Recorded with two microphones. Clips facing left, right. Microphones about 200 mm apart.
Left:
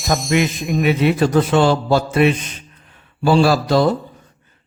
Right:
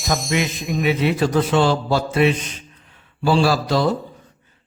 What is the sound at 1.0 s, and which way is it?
A man's voice, 50° left (ahead or behind).